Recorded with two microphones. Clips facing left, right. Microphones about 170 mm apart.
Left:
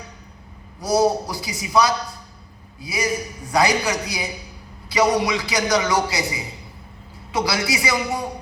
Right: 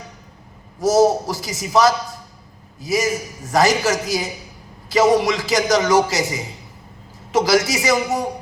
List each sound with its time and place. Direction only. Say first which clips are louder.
0.8 s a man's voice: right 4 dB; 45° right (ahead or behind)
2.8 s a man's voice: right 4 dB; 45° right (ahead or behind)